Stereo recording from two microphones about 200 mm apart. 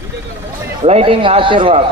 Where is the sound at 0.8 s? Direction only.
30° right (ahead or behind).